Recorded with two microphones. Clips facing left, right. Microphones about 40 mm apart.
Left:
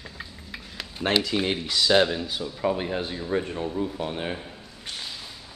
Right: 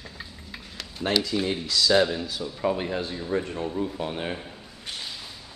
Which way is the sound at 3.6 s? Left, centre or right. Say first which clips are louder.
Even; centre.